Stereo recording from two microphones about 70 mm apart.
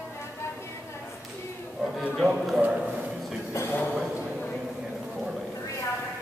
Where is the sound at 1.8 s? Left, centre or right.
Centre.